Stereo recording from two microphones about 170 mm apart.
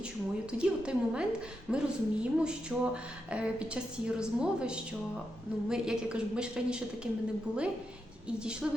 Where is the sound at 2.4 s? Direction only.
5° right (ahead or behind).